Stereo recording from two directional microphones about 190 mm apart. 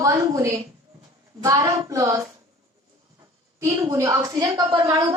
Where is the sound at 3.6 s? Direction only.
15° right (ahead or behind).